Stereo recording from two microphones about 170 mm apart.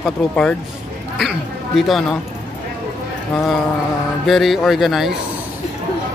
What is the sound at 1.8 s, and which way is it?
Speech, centre (ahead or behind).